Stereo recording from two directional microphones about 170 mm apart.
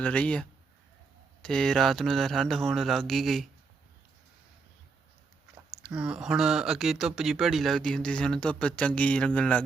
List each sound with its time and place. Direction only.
0.0 s speech: 5° left (ahead or behind)
5.8 s speech: 5° right (ahead or behind)